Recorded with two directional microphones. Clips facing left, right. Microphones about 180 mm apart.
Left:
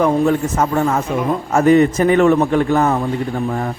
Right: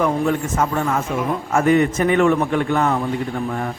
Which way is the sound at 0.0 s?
35° left (ahead or behind).